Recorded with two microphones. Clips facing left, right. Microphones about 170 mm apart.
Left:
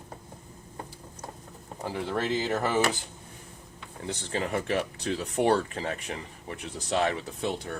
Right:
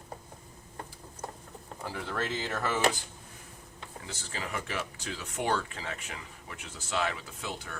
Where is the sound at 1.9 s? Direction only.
20° left (ahead or behind).